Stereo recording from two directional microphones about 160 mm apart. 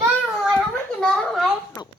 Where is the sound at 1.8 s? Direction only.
25° left (ahead or behind).